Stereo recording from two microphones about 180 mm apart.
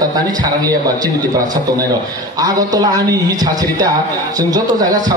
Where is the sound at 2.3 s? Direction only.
20° right (ahead or behind).